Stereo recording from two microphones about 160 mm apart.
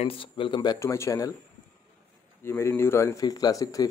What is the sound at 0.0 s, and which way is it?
Speech, 35° left (ahead or behind).